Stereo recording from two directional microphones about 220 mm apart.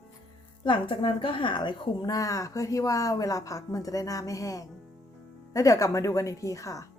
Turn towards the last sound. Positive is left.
turn(degrees=15)  # may be behind; listen again after turning